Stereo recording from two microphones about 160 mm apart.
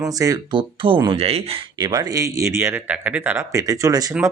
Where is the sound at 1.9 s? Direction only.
25° right (ahead or behind).